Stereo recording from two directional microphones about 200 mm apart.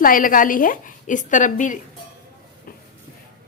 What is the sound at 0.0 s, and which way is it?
A woman's voice, 45° left (ahead or behind).